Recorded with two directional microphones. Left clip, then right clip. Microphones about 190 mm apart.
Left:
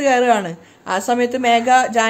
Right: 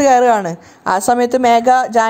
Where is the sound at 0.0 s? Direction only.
25° right (ahead or behind).